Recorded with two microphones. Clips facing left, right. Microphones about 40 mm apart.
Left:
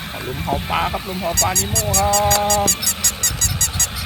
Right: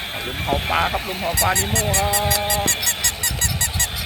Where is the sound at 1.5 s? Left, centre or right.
Right.